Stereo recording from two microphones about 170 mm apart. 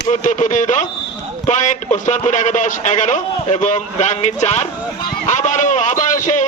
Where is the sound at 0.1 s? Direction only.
45° left (ahead or behind).